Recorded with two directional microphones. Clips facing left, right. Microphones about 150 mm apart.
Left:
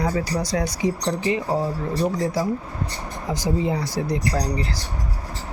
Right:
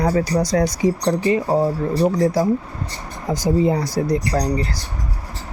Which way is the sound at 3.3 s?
40° right (ahead or behind).